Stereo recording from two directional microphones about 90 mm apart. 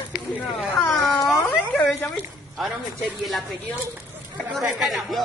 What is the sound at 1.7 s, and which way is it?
Speech, 15° left (ahead or behind).